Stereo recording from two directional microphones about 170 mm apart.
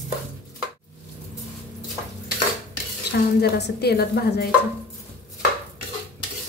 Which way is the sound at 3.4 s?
75° left (ahead or behind).